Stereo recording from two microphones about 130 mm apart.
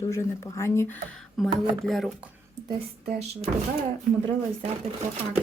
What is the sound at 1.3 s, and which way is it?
Speech, centre (ahead or behind).